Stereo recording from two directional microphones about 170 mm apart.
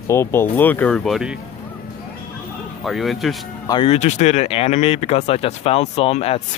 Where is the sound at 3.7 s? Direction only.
35° left (ahead or behind).